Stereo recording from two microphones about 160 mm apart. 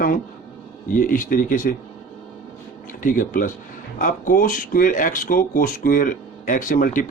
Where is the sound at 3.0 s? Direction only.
60° left (ahead or behind).